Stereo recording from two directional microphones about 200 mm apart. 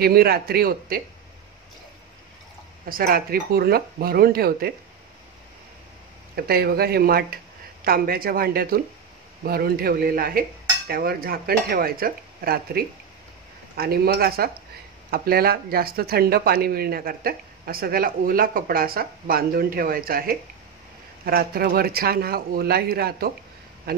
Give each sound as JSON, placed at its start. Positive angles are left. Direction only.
{"t": 0.0, "sound": "speech", "side_deg": -50}
{"t": 2.9, "sound": "speech", "side_deg": -45}
{"t": 6.3, "sound": "speech", "side_deg": -50}